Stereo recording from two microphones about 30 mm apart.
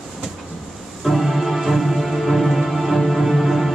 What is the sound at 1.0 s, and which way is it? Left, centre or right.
Music, centre.